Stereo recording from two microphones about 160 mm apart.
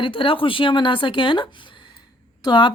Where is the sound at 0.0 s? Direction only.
35° left (ahead or behind).